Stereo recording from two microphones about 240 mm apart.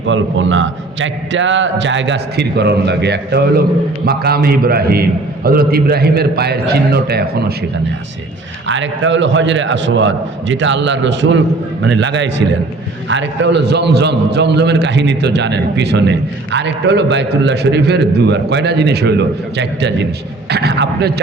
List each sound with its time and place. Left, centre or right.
0.0 s a man's voice: right
8.6 s a man's voice: right